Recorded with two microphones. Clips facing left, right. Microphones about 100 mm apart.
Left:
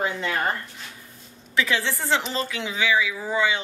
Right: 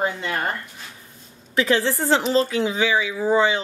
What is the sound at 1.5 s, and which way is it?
Speech, 40° right (ahead or behind).